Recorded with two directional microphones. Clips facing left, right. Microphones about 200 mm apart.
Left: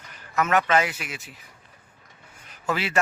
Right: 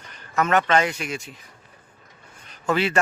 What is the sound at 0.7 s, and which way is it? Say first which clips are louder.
Speech: right 2 dB; 5° left (ahead or behind).